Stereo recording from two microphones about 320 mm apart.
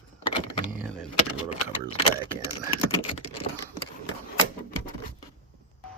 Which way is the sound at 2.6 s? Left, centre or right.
Centre.